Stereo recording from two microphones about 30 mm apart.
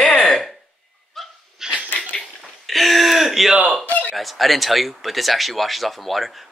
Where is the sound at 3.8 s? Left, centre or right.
Left.